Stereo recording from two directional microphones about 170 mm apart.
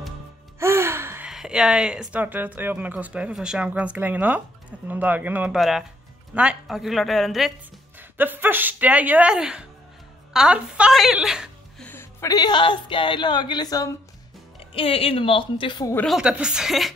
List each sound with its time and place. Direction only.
0.6 s music: 15° right (ahead or behind)
1.3 s a woman's voice: centre (ahead or behind)
8.2 s a woman's voice: 10° right (ahead or behind)
11.8 s a woman's voice: 15° left (ahead or behind)
14.7 s a woman's voice: 35° left (ahead or behind)
16.1 s a woman's voice: 5° right (ahead or behind)